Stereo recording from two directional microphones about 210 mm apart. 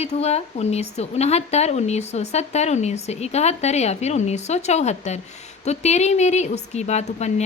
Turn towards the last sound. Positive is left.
turn(degrees=30)  # may be behind; listen again after turning